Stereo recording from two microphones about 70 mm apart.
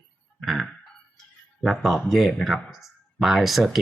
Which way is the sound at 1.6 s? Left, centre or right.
Centre.